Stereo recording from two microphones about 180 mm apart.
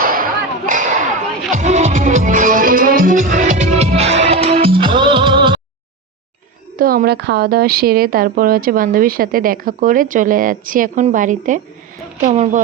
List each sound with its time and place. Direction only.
0.0 s a sound: 50° right (ahead or behind)
1.5 s music: 40° right (ahead or behind)
6.7 s a woman's voice: 55° right (ahead or behind)